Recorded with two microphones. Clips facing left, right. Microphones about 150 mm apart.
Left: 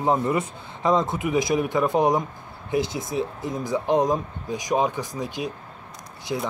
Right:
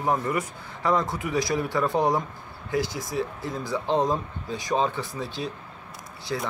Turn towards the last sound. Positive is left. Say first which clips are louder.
# left 2 dB
turn(degrees=10)  # may be behind; listen again after turning